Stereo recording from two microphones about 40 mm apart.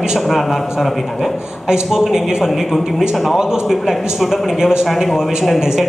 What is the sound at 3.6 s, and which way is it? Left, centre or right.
A man's voice, centre.